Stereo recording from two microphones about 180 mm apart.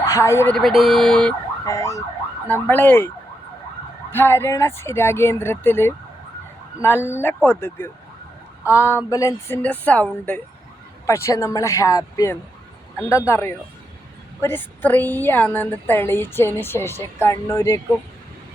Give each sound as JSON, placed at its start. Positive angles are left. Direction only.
{"t": 0.0, "sound": "speech", "side_deg": 15}
{"t": 0.5, "sound": "speech", "side_deg": 0}
{"t": 1.6, "sound": "a woman's voice", "side_deg": 15}
{"t": 4.1, "sound": "a woman's voice", "side_deg": 10}